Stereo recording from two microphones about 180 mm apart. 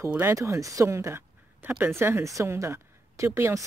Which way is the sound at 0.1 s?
15° right (ahead or behind).